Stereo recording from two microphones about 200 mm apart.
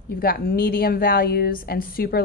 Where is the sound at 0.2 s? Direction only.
50° left (ahead or behind).